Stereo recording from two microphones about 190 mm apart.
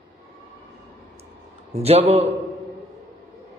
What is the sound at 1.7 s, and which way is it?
Speech, 35° right (ahead or behind).